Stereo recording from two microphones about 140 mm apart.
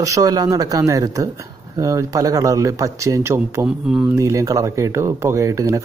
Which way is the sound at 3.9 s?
10° right (ahead or behind).